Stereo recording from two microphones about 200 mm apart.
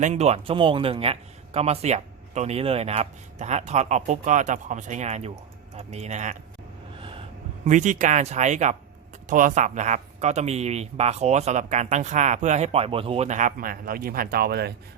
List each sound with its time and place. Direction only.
0.0 s speech: 30° right (ahead or behind)
7.6 s speech: 40° right (ahead or behind)